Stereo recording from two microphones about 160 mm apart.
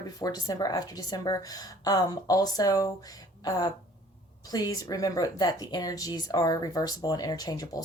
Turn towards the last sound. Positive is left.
turn(degrees=20)  # may be behind; listen again after turning